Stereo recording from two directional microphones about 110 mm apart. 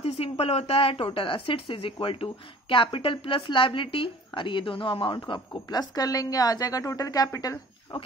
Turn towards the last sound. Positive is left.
turn(degrees=30)  # may be behind; listen again after turning